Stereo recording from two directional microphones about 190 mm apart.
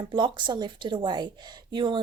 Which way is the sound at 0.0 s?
25° right (ahead or behind).